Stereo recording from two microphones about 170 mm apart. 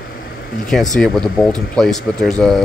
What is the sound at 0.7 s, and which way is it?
Speech, 5° left (ahead or behind).